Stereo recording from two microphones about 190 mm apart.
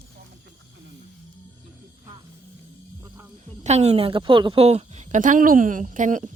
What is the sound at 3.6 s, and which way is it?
A woman's voice, 35° right (ahead or behind).